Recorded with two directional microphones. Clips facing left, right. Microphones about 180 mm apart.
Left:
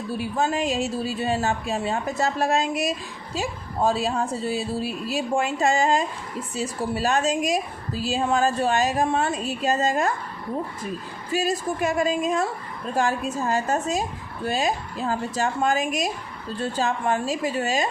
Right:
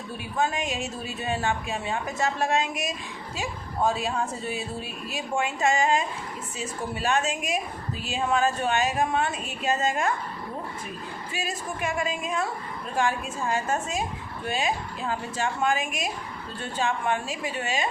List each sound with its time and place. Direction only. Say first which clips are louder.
0.2 s a woman's voice: left 3 dB; 35° left (ahead or behind)
11.3 s a woman's voice: left 10 dB; 40° left (ahead or behind)